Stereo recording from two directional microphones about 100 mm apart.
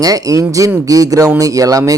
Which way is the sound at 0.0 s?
35° right (ahead or behind).